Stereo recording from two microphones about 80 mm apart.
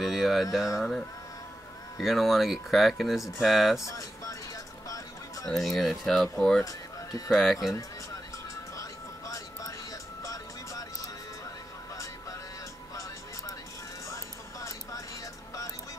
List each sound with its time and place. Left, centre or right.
0.0 s speech: centre
0.7 s speech: centre
3.8 s music: left
4.8 s a sound: left
5.5 s speech: centre
6.6 s a sound: left
7.2 s speech: centre
9.3 s a sound: left
10.2 s music: left
14.0 s music: left